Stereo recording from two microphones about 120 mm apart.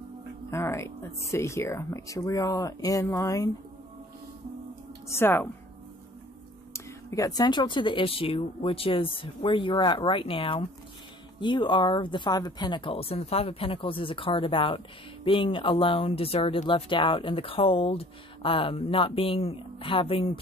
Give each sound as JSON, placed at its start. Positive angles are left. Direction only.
{"t": 0.5, "sound": "speech", "side_deg": 25}
{"t": 5.0, "sound": "speech", "side_deg": 20}
{"t": 6.7, "sound": "speech", "side_deg": 25}